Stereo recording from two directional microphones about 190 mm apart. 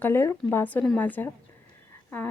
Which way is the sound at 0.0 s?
10° left (ahead or behind).